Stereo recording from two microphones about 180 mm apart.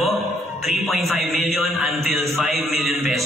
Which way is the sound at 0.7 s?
Centre (ahead or behind).